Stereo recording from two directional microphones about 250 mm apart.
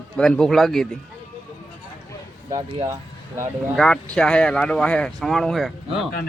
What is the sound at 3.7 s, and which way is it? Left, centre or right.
Speech, centre.